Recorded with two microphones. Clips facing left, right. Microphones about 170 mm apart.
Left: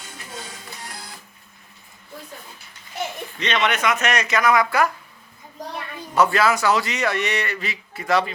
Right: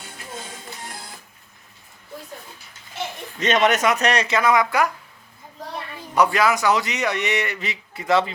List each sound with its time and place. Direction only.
3.3 s speech: 45° right (ahead or behind); by 4.9 s 20° right (ahead or behind)
6.1 s a man's voice: 15° right (ahead or behind)